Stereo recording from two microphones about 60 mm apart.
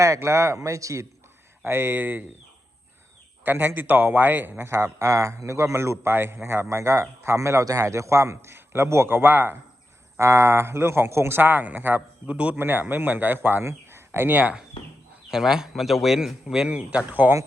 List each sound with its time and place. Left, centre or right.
0.0 s speech: right
1.6 s speech: right
3.4 s speech: right
4.6 s speech: right
7.6 s speech: right
10.2 s speech: right
12.2 s a man's voice: right
12.5 s speech: right
13.7 s a sound: right
14.3 s a man's voice: right
15.3 s speech: centre
17.1 s a man's voice: right